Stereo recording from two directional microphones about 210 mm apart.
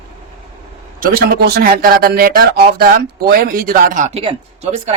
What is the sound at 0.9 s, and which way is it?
A man's voice, 45° right (ahead or behind).